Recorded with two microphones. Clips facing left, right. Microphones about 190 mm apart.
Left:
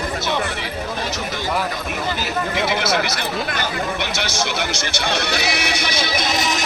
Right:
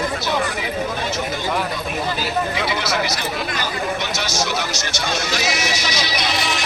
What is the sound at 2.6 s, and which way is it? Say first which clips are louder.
Speech: left 2 dB; 55° left (ahead or behind).